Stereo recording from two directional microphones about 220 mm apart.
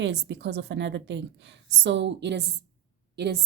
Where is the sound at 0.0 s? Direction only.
50° right (ahead or behind).